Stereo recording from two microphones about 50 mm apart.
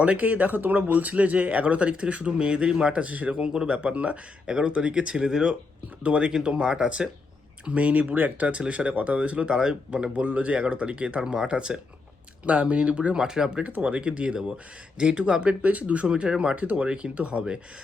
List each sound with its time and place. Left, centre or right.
0.0 s speech: right
13.2 s speech: centre
13.6 s speech: right
16.6 s speech: right